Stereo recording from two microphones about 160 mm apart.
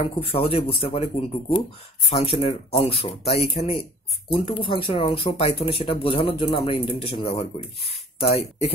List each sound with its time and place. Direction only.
0.0 s speech: 35° left (ahead or behind)